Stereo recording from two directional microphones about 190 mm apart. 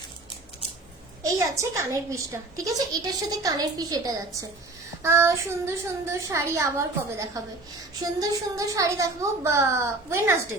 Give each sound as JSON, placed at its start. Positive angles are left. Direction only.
{"t": 1.2, "sound": "a child's voice", "side_deg": -15}